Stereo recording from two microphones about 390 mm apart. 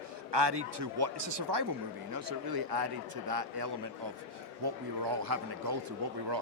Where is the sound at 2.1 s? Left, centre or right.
Right.